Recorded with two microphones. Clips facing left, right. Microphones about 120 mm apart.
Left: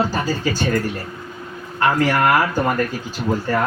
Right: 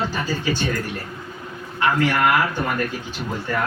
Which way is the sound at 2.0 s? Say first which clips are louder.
Left 2 dB; 40° left (ahead or behind).